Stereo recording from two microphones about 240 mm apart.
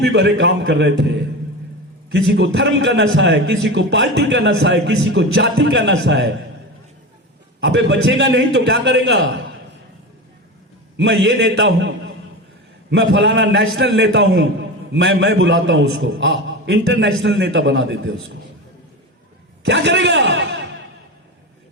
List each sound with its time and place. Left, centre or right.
0.0 s a man's voice: right
2.1 s a man's voice: right
7.6 s a man's voice: right
10.9 s a man's voice: right
19.6 s a man's voice: right